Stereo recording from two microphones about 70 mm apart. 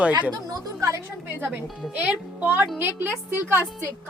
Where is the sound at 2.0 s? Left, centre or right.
Right.